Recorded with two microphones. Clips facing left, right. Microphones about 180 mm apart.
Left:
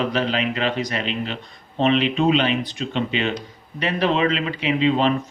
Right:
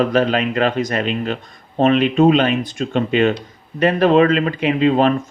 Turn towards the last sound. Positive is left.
turn(degrees=-50)  # may be behind; listen again after turning